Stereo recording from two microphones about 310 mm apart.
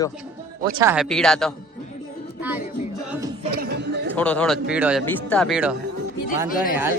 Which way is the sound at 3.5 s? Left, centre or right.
Right.